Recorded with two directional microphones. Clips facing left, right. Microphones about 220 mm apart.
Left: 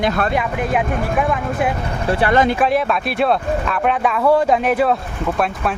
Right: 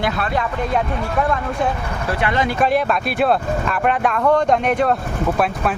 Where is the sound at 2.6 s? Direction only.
Centre (ahead or behind).